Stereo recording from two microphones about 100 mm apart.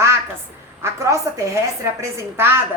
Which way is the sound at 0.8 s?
30° right (ahead or behind).